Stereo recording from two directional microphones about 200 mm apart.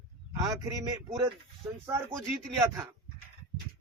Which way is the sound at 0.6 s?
15° right (ahead or behind).